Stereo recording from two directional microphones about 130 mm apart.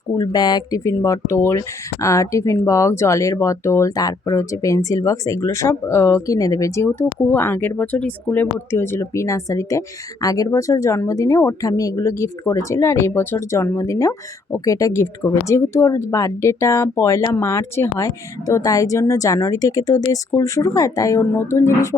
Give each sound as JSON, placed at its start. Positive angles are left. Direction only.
{"t": 0.2, "sound": "speech", "side_deg": 30}